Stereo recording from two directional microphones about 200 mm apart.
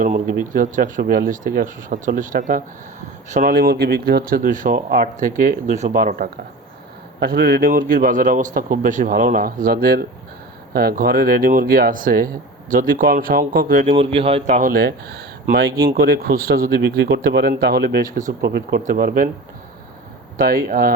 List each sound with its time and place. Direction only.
0.0 s speech: 40° right (ahead or behind)
13.8 s speech: 30° right (ahead or behind); by 19.3 s 45° right (ahead or behind)
20.3 s speech: 45° right (ahead or behind)